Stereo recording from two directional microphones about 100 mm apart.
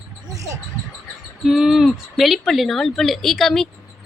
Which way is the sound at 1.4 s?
5° right (ahead or behind).